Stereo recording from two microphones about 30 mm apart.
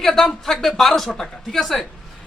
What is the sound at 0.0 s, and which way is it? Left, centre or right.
Speech, centre.